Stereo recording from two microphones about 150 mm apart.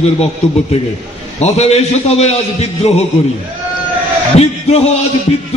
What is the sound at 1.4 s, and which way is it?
A man's voice, 45° left (ahead or behind).